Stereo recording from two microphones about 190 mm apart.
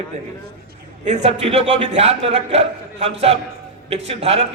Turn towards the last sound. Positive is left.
turn(degrees=-30)  # may be behind; listen again after turning